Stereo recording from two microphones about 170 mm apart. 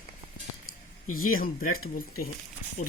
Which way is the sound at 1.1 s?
55° left (ahead or behind).